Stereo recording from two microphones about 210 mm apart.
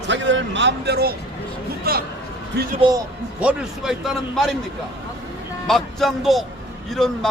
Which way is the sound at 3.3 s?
5° right (ahead or behind).